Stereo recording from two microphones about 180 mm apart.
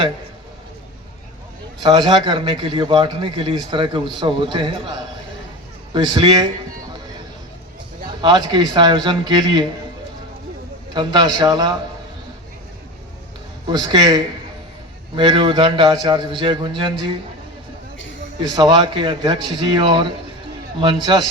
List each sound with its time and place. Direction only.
1.8 s a man's voice: 25° right (ahead or behind)
6.1 s a man's voice: 25° right (ahead or behind)
8.2 s a man's voice: 25° right (ahead or behind)
10.9 s a man's voice: 25° right (ahead or behind)
13.7 s a man's voice: 25° right (ahead or behind)
18.5 s a man's voice: 25° right (ahead or behind)